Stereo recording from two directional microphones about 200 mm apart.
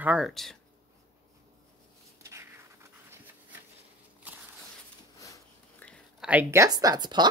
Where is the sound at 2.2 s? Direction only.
15° right (ahead or behind).